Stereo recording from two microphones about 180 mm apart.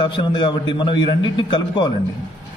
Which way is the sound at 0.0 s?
25° left (ahead or behind).